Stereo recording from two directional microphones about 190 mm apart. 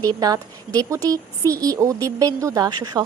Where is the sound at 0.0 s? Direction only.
20° right (ahead or behind).